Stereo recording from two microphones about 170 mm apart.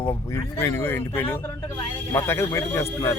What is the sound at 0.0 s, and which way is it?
Speech, 15° left (ahead or behind).